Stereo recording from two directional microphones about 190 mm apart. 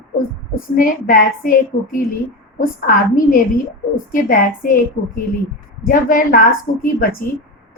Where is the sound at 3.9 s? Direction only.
45° left (ahead or behind).